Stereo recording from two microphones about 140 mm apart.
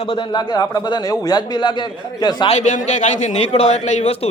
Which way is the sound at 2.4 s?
55° left (ahead or behind).